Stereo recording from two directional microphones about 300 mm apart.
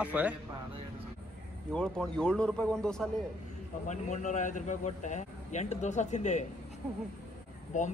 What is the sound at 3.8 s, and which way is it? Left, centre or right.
Speech, left.